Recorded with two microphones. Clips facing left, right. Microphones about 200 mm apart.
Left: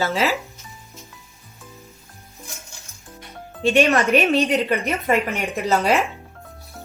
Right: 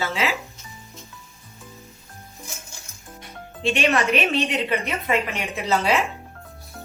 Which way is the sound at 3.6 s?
45° left (ahead or behind).